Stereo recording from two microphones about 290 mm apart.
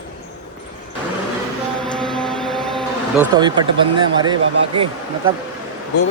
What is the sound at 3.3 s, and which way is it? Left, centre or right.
Speech, centre.